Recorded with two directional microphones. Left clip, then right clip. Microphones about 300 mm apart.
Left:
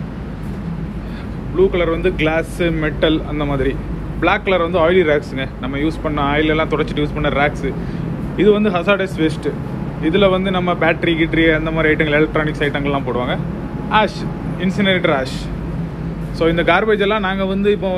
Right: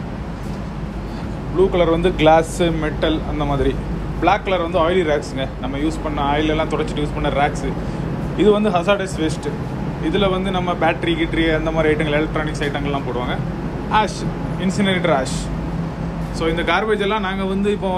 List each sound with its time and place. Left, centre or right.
1.6 s a man's voice: centre
16.3 s speech: centre